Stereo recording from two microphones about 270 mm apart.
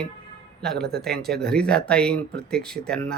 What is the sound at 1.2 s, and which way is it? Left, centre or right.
Speech, centre.